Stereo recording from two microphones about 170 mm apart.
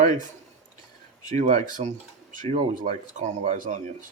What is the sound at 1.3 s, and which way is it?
Cutlery, 45° right (ahead or behind).